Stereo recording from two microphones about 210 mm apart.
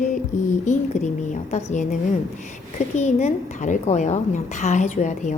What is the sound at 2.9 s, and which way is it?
A woman's voice, 35° left (ahead or behind).